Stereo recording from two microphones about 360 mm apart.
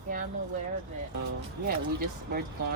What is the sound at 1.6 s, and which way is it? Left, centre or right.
Speech, right.